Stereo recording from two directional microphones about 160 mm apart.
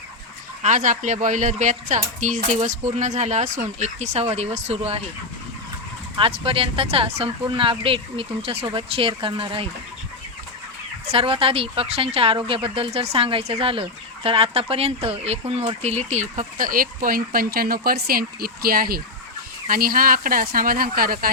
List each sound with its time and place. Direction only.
0.6 s speech: 50° right (ahead or behind)
6.1 s speech: 35° right (ahead or behind)
11.0 s speech: 35° right (ahead or behind); by 21.2 s 65° right (ahead or behind)